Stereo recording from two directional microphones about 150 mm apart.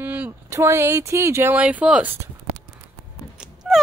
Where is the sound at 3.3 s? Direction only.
Centre (ahead or behind).